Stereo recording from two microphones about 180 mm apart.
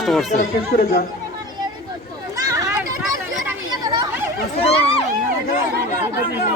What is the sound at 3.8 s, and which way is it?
Chatter, 20° right (ahead or behind).